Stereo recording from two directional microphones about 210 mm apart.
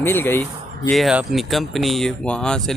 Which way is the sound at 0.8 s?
Centre (ahead or behind).